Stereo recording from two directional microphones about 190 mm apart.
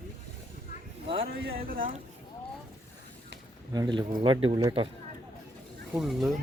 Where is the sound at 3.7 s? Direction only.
20° right (ahead or behind).